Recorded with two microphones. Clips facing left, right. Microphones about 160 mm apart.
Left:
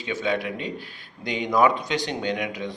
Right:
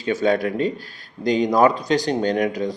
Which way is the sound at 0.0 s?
40° right (ahead or behind).